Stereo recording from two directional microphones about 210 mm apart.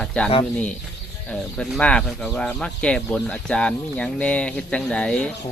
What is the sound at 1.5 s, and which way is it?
Speech, 5° left (ahead or behind).